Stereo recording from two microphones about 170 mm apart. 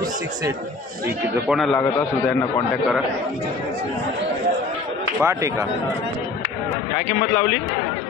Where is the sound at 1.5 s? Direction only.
Centre (ahead or behind).